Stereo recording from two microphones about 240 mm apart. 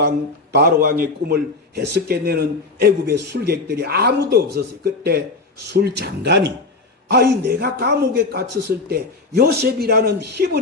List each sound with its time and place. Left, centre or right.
0.5 s a man's voice: right